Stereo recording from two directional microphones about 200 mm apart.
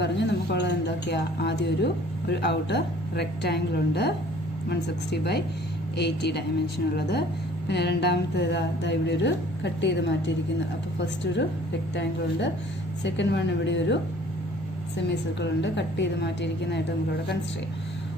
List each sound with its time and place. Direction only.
0.0 s a woman's voice: 60° left (ahead or behind)
13.0 s a woman's voice: 60° left (ahead or behind)